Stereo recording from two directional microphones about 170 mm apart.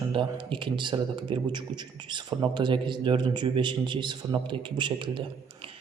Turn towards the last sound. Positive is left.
turn(degrees=-30)  # may be behind; listen again after turning